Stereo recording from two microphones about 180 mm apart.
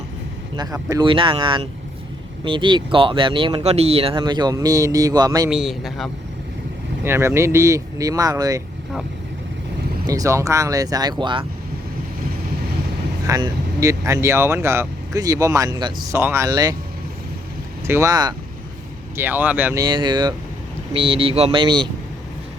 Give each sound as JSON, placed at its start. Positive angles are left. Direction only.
{"t": 0.5, "sound": "speech", "side_deg": -20}
{"t": 5.5, "sound": "a man's voice", "side_deg": -5}
{"t": 7.0, "sound": "speech", "side_deg": -15}
{"t": 10.1, "sound": "speech", "side_deg": -20}
{"t": 13.2, "sound": "speech", "side_deg": -20}
{"t": 17.8, "sound": "speech", "side_deg": -15}
{"t": 19.1, "sound": "speech", "side_deg": -10}
{"t": 19.8, "sound": "speech", "side_deg": -25}